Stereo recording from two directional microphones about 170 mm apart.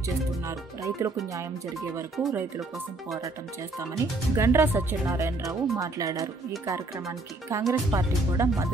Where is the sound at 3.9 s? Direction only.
15° right (ahead or behind).